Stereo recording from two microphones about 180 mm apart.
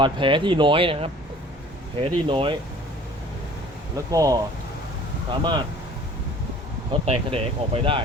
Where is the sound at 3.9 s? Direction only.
20° right (ahead or behind).